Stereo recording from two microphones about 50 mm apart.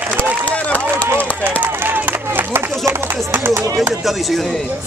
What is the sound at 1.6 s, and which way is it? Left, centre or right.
Run, right.